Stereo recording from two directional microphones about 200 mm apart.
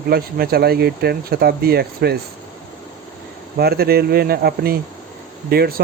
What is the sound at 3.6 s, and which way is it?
Speech, 50° right (ahead or behind).